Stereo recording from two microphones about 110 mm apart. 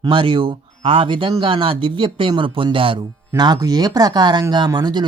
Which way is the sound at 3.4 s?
40° right (ahead or behind).